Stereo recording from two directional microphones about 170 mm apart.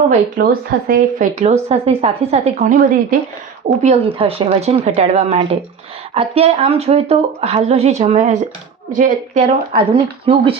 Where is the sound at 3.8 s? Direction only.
35° right (ahead or behind).